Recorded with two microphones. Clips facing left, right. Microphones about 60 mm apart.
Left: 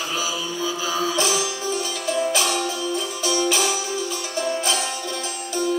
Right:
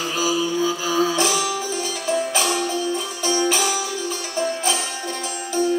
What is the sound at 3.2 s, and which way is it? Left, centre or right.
Music, right.